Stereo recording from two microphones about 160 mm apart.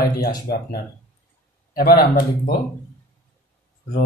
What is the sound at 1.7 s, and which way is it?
Speech, 65° left (ahead or behind).